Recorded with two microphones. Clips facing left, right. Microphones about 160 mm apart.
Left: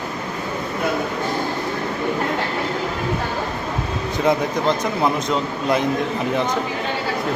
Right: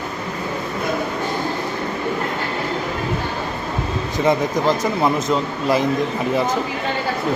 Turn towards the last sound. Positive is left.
turn(degrees=0)  # may be behind; listen again after turning